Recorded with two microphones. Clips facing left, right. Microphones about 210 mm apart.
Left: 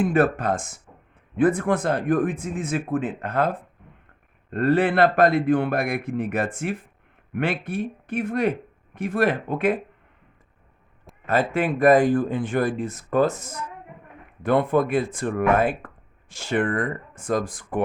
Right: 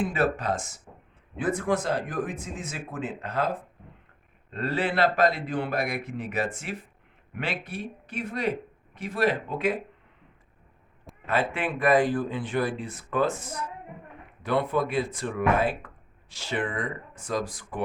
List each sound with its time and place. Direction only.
0.0 s speech: 50° left (ahead or behind)
11.3 s speech: 40° left (ahead or behind)